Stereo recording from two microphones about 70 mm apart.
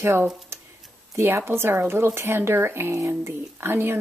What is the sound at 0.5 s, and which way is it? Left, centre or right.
Tick-tock, right.